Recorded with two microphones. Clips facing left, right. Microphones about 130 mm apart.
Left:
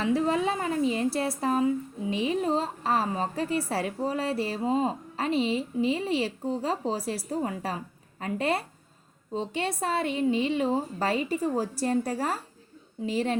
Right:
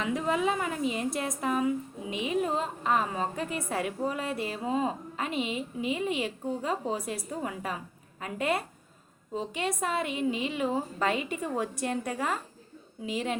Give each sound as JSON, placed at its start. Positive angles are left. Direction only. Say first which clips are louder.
{"t": 0.0, "sound": "a woman's voice", "louder": "left 3 dB", "side_deg": 35}